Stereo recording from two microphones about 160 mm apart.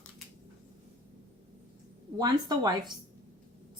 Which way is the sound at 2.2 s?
25° right (ahead or behind).